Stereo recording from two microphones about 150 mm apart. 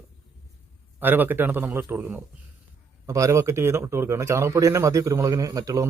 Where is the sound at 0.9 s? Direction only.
15° right (ahead or behind).